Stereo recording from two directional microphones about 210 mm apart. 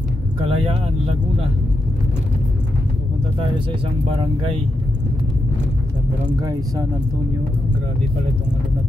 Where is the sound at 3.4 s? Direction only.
25° right (ahead or behind).